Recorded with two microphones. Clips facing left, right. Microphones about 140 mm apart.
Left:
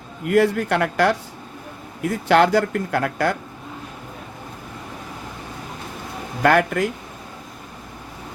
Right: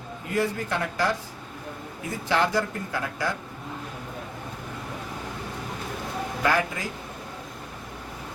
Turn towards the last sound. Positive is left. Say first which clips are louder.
# left 8 dB
turn(degrees=65)  # may be behind; listen again after turning